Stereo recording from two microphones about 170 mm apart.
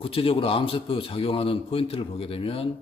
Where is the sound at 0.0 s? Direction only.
35° left (ahead or behind).